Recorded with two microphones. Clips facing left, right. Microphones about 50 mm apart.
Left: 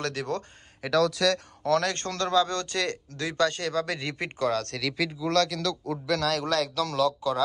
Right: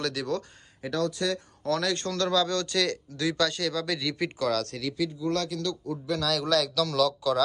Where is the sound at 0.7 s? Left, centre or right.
Left.